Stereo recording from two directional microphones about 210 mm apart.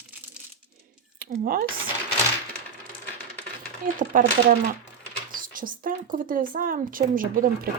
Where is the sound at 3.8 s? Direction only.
40° right (ahead or behind).